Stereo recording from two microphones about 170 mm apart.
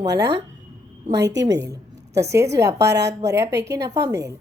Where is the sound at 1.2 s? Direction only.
90° right.